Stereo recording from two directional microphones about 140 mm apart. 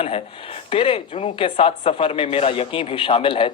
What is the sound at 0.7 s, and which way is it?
Speech, 40° left (ahead or behind).